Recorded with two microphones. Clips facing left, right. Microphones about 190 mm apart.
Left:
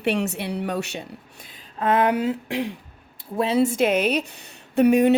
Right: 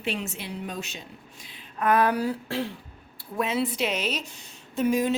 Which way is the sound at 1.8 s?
25° left (ahead or behind).